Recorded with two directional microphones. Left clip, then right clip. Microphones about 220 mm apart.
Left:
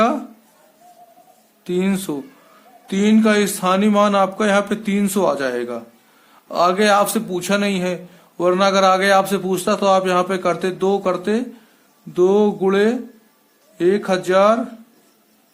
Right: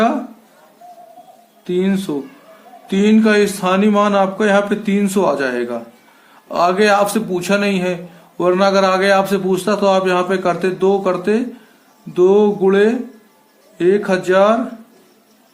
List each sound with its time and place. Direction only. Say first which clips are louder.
1.6 s speech: right 3 dB; 35° left (ahead or behind)
2.8 s a man's voice: right 3 dB; 25° left (ahead or behind)